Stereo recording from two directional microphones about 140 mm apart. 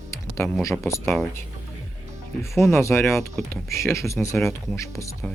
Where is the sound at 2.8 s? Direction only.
20° left (ahead or behind).